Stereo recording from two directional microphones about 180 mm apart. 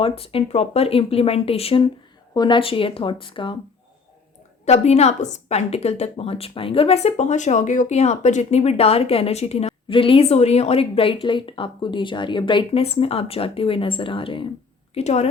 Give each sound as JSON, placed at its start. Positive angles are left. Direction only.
{"t": 0.0, "sound": "a woman's voice", "side_deg": 30}
{"t": 4.6, "sound": "a woman's voice", "side_deg": 35}